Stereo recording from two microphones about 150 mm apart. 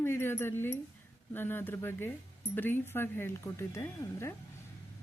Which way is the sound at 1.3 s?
15° left (ahead or behind).